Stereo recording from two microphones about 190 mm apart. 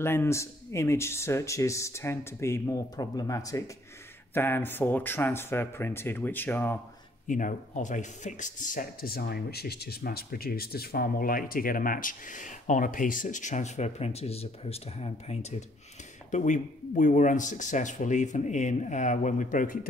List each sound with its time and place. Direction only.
0.0 s speech: 15° left (ahead or behind)
7.2 s speech: 45° left (ahead or behind)